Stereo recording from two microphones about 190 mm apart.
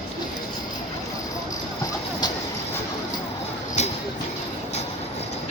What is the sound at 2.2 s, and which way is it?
Clip-clop, 20° left (ahead or behind).